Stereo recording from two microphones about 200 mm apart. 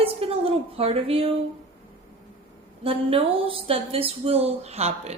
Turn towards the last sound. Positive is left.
turn(degrees=-30)  # may be behind; listen again after turning